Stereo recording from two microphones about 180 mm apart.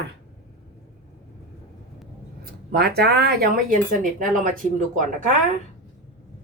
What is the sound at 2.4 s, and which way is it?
Speech, 65° right (ahead or behind).